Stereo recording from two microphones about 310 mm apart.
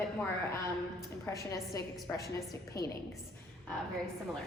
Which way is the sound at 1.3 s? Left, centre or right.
Centre.